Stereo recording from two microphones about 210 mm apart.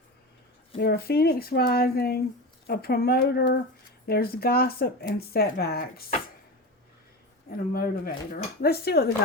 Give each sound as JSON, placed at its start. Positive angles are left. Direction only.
{"t": 0.8, "sound": "speech", "side_deg": 50}
{"t": 7.5, "sound": "speech", "side_deg": 45}